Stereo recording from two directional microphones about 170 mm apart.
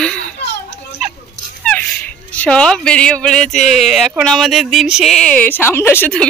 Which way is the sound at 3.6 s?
40° left (ahead or behind).